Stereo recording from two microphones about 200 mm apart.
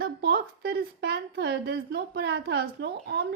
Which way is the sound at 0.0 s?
55° right (ahead or behind).